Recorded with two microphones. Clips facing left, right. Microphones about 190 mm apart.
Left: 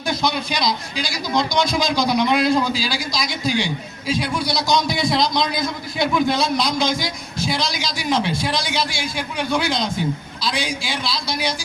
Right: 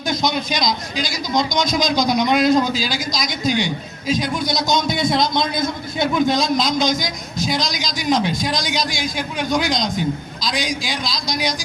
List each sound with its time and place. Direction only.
0.1 s a man's voice: 20° right (ahead or behind)